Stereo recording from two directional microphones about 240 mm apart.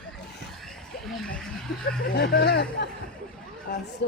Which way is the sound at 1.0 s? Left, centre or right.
Centre.